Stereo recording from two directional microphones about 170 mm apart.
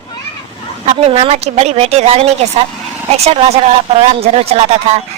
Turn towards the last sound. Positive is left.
turn(degrees=-35)  # may be behind; listen again after turning